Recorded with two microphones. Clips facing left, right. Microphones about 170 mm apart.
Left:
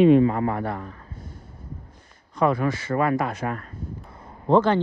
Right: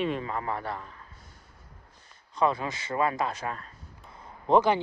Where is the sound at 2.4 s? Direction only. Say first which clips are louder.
Left 5 dB; 25° right (ahead or behind).